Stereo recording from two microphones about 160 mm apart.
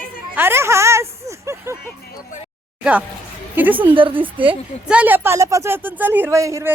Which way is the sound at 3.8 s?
30° right (ahead or behind).